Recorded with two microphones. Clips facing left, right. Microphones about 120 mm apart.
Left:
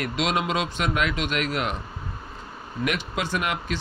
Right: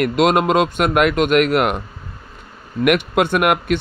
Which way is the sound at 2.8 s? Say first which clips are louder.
Right 12 dB; 60° right (ahead or behind).